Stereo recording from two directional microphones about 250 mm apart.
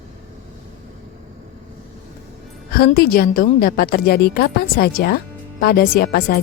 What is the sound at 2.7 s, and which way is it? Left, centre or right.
A woman's voice, left.